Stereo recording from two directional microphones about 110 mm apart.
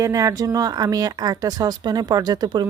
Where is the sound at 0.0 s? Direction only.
30° right (ahead or behind).